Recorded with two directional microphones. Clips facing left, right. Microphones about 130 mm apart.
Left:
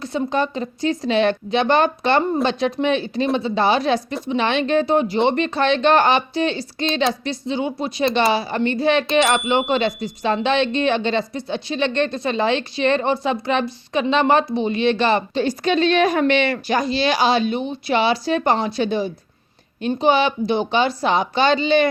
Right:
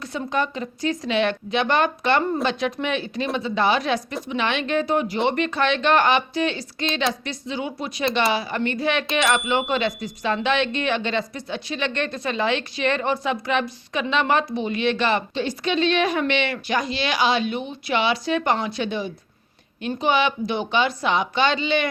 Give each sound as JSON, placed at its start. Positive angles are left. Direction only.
{"t": 0.0, "sound": "a woman's voice", "side_deg": 30}